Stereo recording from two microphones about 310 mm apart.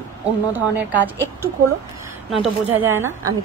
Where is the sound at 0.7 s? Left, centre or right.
Centre.